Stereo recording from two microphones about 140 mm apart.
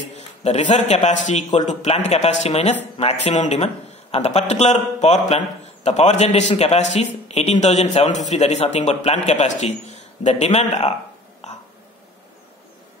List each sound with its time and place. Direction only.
0.1 s a man's voice: 55° left (ahead or behind)